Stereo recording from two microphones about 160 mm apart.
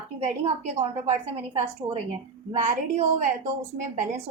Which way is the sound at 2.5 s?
45° right (ahead or behind).